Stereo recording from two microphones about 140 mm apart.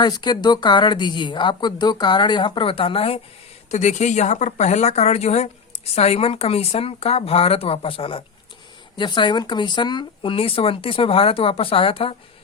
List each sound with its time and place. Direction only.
0.0 s speech: 30° left (ahead or behind)
3.7 s speech: 55° left (ahead or behind)